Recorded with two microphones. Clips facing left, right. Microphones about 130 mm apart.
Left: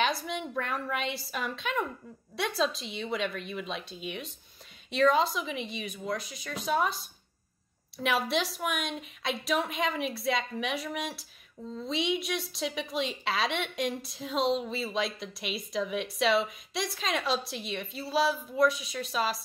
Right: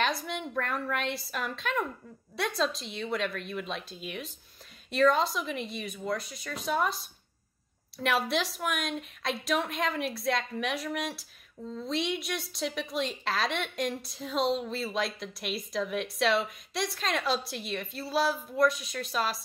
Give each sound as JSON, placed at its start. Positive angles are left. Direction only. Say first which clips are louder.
{"t": 0.0, "sound": "a woman's voice", "louder": "left 1 dB", "side_deg": 0}